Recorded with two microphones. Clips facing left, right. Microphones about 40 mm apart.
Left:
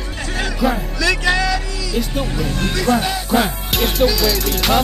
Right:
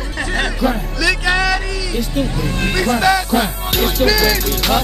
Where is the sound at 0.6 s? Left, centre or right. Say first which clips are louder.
Left 2 dB; centre.